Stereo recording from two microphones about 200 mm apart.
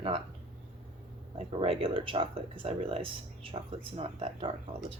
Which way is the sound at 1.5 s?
30° right (ahead or behind).